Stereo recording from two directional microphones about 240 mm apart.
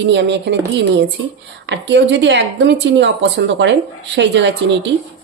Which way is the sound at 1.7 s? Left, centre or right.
Right.